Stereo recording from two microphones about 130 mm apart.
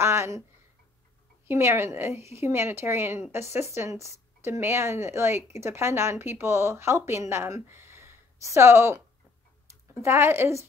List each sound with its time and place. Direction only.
0.0 s a sound: 20° right (ahead or behind)
1.5 s speech: 20° right (ahead or behind)
10.0 s speech: 20° right (ahead or behind)